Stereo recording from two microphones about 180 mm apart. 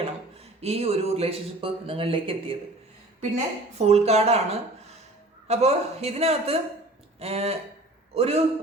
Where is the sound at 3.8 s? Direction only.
35° right (ahead or behind).